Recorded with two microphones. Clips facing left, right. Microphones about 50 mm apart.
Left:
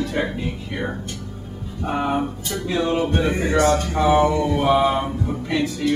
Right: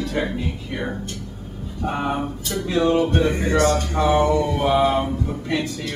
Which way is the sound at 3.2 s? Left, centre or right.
Centre.